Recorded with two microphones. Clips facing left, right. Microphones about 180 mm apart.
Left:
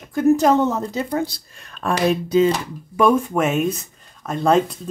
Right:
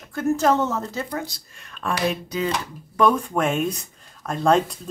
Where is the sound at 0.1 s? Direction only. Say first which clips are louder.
Left 5 dB; 15° left (ahead or behind).